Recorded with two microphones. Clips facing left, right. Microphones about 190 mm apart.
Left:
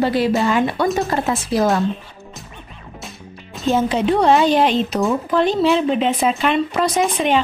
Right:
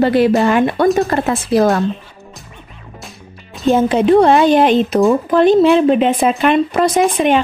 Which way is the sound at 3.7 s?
50° right (ahead or behind).